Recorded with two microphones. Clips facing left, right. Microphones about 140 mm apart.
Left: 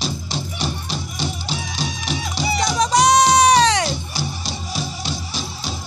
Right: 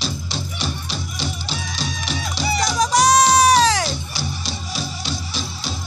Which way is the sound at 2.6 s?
Centre (ahead or behind).